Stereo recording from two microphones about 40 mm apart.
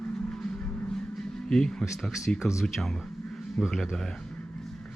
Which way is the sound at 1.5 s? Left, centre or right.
Centre.